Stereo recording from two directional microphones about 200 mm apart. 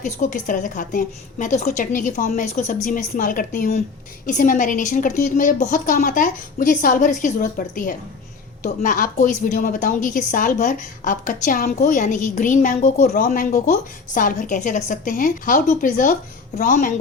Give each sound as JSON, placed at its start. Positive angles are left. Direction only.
{"t": 0.0, "sound": "a woman's voice", "side_deg": 40}